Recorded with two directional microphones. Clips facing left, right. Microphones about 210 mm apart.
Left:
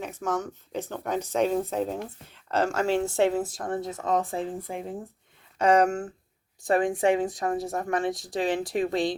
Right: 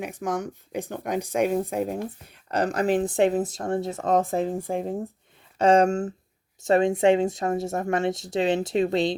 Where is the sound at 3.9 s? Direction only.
45° right (ahead or behind).